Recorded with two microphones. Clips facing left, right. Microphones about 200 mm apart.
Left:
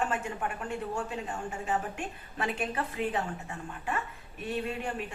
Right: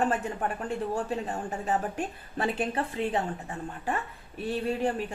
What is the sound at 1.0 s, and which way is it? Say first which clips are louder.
A woman's voice: right 4 dB; 35° right (ahead or behind).